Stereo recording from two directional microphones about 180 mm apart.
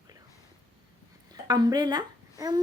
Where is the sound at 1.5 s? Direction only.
20° right (ahead or behind).